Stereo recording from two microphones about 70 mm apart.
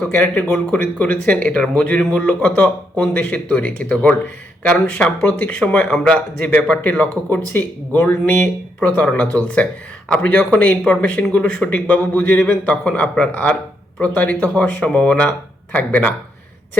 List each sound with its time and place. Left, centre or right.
0.0 s speech: left
7.0 s speech: left